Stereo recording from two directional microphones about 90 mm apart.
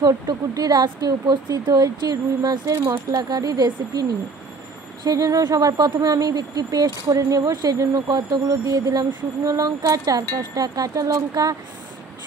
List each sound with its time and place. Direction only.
0.0 s speech: 45° right (ahead or behind)
5.0 s speech: 40° right (ahead or behind)